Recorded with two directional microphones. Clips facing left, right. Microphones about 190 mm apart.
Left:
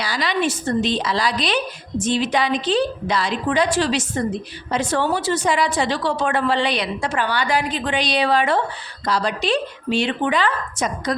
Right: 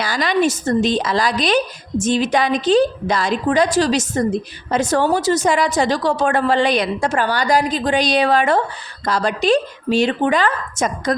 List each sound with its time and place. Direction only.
0.0 s a woman's voice: 45° right (ahead or behind)